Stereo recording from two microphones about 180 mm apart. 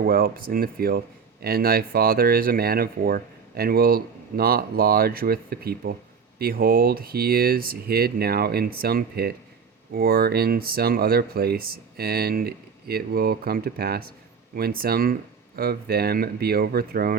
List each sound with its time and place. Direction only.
0.0 s speech: 55° right (ahead or behind)